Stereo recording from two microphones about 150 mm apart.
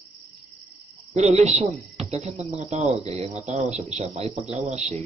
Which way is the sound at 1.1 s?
50° right (ahead or behind).